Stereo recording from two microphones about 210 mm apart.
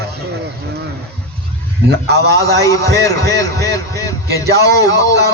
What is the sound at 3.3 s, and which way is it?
A man's voice, 15° left (ahead or behind).